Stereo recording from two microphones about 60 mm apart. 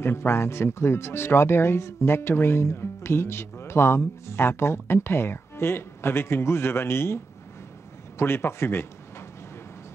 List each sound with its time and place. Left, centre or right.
0.0 s speech: left
8.2 s a man's voice: left